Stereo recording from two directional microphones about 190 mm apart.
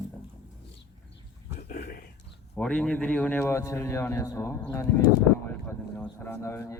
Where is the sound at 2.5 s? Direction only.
5° left (ahead or behind).